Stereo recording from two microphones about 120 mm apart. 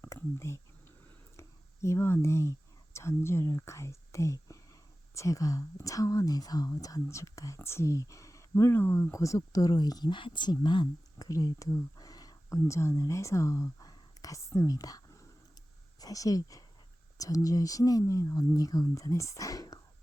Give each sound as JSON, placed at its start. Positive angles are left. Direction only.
{"t": 0.0, "sound": "whispering", "side_deg": 20}
{"t": 1.4, "sound": "a sound", "side_deg": 25}
{"t": 2.9, "sound": "a woman's voice", "side_deg": 20}